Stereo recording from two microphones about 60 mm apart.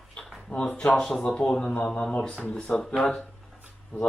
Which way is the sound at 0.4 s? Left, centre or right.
Centre.